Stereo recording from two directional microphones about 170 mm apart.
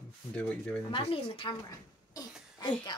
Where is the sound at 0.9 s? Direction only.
35° left (ahead or behind).